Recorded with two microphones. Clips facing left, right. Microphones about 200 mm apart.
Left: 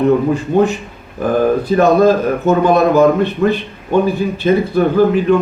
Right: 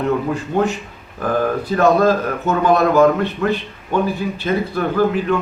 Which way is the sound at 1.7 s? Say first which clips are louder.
Left 3 dB; 20° left (ahead or behind).